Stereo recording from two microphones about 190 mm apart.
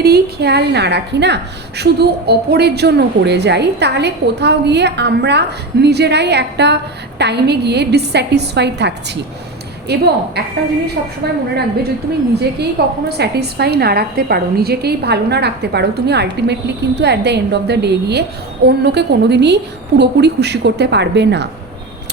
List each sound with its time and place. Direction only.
0.0 s a woman's voice: 55° right (ahead or behind)